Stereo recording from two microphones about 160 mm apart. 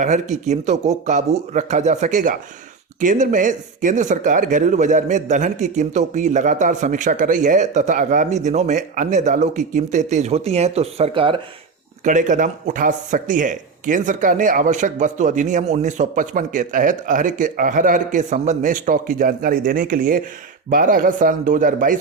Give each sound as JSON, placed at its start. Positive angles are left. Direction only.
{"t": 0.0, "sound": "speech", "side_deg": -50}
{"t": 12.0, "sound": "speech", "side_deg": -55}